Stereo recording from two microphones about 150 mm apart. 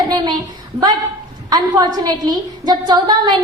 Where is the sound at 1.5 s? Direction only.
30° right (ahead or behind).